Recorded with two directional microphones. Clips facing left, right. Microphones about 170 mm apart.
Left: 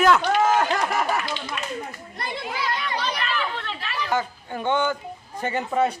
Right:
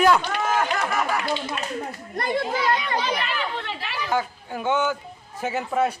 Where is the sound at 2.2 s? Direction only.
50° right (ahead or behind).